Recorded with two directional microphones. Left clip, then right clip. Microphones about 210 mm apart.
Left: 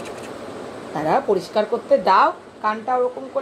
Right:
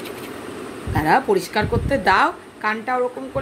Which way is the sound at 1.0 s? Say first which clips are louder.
Right 2 dB; 40° right (ahead or behind).